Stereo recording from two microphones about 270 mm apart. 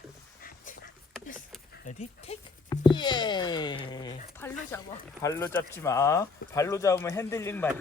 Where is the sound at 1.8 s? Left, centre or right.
Left; by 7.7 s centre.